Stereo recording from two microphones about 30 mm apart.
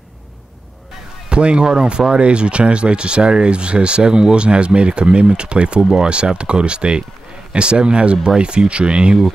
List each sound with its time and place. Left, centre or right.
1.3 s speech: right
5.8 s speech: right
6.1 s speech: right